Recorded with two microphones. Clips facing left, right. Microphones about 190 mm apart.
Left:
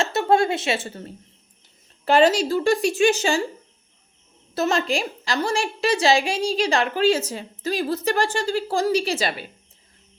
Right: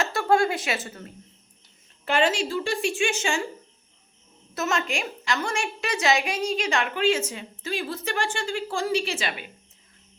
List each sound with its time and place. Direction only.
0.0 s a woman's voice: 25° left (ahead or behind)
4.5 s a woman's voice: 35° left (ahead or behind)